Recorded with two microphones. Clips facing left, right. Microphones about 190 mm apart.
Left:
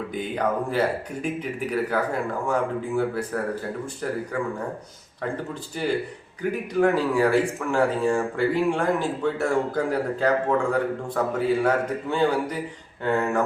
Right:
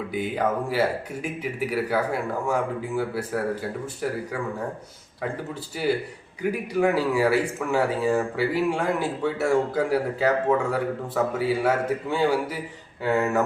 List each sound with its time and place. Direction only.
0.1 s speech: 5° right (ahead or behind)
6.5 s speech: 10° right (ahead or behind)